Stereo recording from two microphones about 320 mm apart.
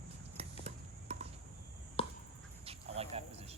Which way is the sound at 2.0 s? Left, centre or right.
Centre.